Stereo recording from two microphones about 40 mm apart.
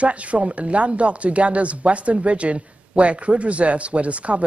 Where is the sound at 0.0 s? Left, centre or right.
Right.